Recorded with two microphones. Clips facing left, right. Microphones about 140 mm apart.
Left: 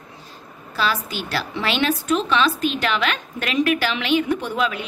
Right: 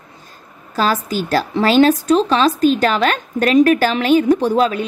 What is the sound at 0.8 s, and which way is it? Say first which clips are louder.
A woman's voice: right 6 dB; 40° right (ahead or behind).